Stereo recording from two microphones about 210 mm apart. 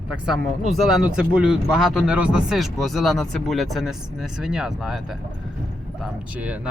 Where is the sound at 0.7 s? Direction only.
Centre (ahead or behind).